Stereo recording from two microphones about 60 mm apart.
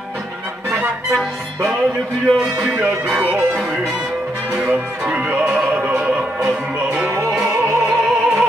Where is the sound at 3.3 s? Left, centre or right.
Right.